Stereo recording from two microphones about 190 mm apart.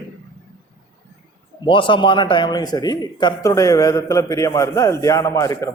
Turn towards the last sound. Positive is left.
turn(degrees=15)  # may be behind; listen again after turning